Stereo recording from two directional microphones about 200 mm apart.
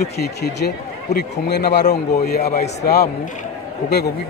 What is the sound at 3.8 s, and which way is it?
Speech, 55° left (ahead or behind).